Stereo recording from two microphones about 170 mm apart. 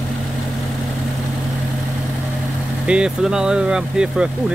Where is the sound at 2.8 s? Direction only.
5° right (ahead or behind).